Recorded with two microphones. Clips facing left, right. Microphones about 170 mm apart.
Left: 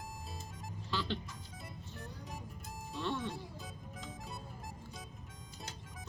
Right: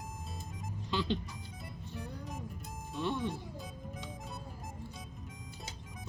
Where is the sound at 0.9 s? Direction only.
20° right (ahead or behind).